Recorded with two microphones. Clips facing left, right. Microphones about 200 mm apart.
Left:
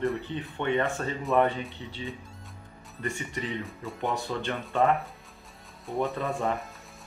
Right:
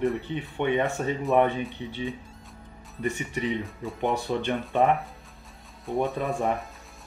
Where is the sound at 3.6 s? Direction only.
Centre (ahead or behind).